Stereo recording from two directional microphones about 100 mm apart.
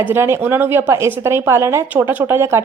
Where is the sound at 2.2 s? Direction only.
25° right (ahead or behind).